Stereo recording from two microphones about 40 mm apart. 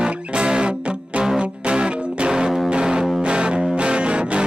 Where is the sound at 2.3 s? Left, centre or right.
Centre.